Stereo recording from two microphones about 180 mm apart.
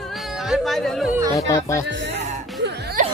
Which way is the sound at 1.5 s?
15° left (ahead or behind).